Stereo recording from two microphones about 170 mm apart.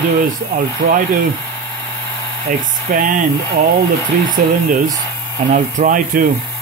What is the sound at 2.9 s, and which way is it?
Speech, 50° right (ahead or behind).